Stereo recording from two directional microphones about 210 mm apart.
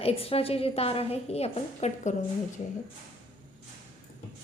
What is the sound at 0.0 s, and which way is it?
A woman's voice, 30° left (ahead or behind).